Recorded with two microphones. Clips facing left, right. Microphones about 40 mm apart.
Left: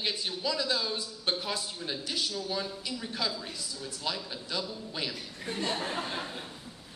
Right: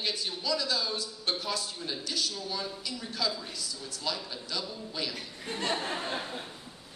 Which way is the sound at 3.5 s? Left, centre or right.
Centre.